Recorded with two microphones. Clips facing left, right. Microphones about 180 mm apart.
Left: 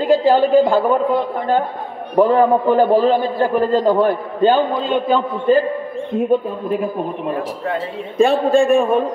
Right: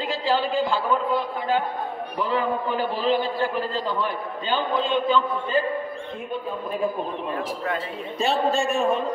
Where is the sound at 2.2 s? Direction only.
50° left (ahead or behind).